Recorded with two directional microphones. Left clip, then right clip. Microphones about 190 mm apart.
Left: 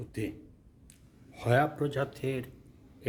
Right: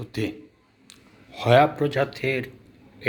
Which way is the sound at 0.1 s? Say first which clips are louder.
Right 9 dB; 30° left (ahead or behind).